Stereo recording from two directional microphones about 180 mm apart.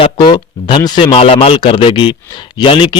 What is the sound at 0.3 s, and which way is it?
A man's voice, 25° left (ahead or behind).